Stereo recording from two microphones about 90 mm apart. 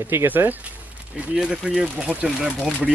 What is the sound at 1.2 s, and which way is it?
Speech, 10° right (ahead or behind).